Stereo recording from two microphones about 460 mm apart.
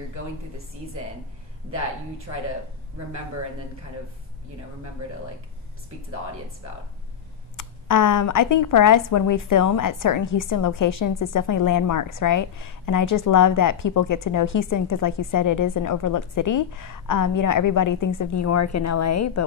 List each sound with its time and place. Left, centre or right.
7.5 s speech: left